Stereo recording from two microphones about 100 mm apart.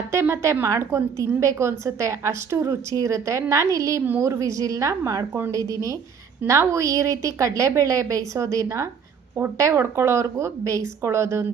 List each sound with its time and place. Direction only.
0.1 s a woman's voice: 30° right (ahead or behind)